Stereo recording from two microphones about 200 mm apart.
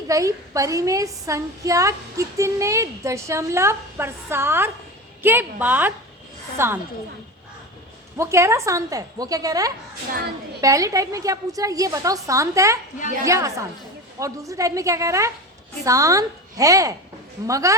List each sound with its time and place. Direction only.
0.1 s a woman's voice: 15° right (ahead or behind)
8.2 s a woman's voice: 15° right (ahead or behind)